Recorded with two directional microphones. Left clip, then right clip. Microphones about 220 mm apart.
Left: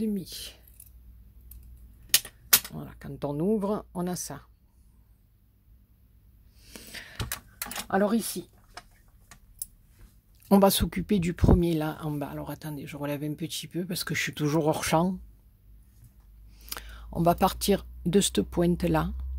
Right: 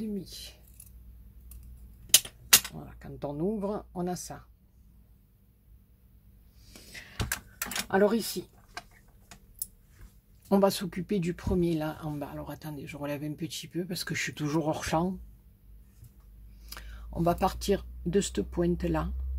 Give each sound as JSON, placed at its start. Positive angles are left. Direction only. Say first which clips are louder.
{"t": 0.0, "sound": "speech", "louder": "left 5 dB", "side_deg": 40}
{"t": 2.7, "sound": "speech", "louder": "left 4 dB", "side_deg": 40}
{"t": 6.6, "sound": "a sound", "louder": "left 4 dB", "side_deg": 40}
{"t": 7.9, "sound": "speech", "louder": "right 1 dB", "side_deg": 45}
{"t": 10.5, "sound": "speech", "louder": "left 4 dB", "side_deg": 40}
{"t": 16.6, "sound": "speech", "louder": "left 6 dB", "side_deg": 40}